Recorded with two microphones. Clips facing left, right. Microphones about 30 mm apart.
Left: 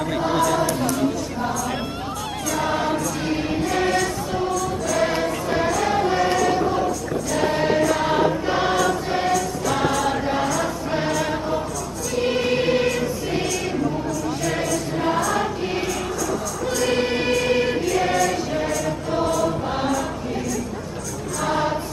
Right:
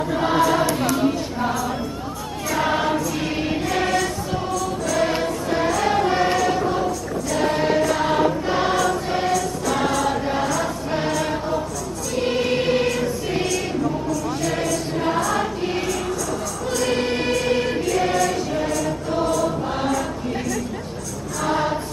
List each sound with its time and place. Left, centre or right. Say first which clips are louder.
0.2 s choir: right 2 dB; right
2.5 s choir: right 2 dB; centre
14.4 s music: even; centre
16.7 s choir: even; centre
21.4 s music: right 1 dB; centre